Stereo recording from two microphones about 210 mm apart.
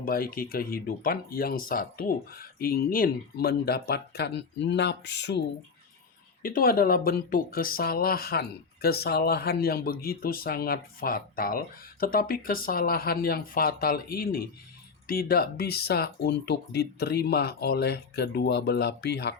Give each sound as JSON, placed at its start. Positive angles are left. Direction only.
{"t": 0.0, "sound": "speech", "side_deg": 45}